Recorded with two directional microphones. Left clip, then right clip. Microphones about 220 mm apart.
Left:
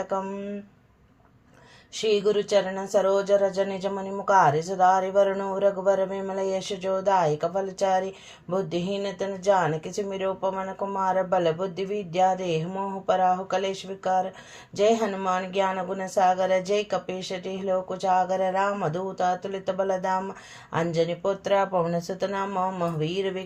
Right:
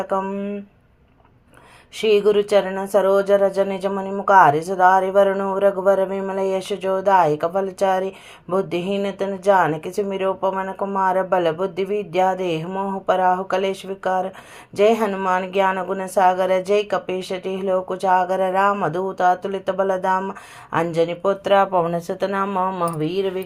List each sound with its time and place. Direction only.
0.0 s speech: 25° right (ahead or behind)
2.0 s speech: 25° right (ahead or behind)